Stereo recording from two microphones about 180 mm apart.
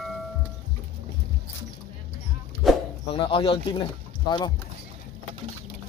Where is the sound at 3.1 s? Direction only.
30° left (ahead or behind).